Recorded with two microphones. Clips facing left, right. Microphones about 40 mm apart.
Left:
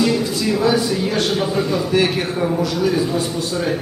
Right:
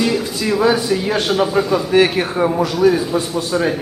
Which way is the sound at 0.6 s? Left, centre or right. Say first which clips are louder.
Right 3 dB; centre.